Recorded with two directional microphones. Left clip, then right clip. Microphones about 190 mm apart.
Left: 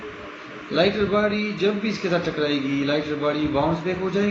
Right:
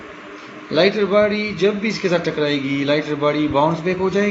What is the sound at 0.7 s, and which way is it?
A man's voice, 40° right (ahead or behind).